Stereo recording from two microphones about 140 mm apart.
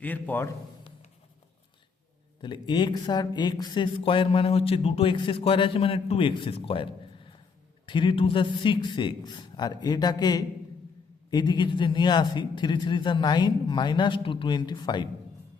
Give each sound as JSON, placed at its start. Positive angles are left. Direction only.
{"t": 0.0, "sound": "a man's voice", "side_deg": 10}
{"t": 2.4, "sound": "speech", "side_deg": 35}
{"t": 7.9, "sound": "speech", "side_deg": 35}